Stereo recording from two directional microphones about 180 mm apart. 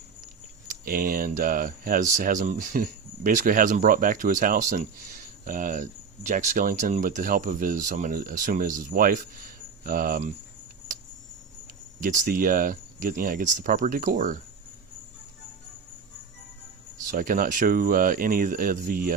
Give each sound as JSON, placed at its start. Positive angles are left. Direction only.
{"t": 0.7, "sound": "speech", "side_deg": -55}
{"t": 11.9, "sound": "speech", "side_deg": -45}
{"t": 17.1, "sound": "speech", "side_deg": -50}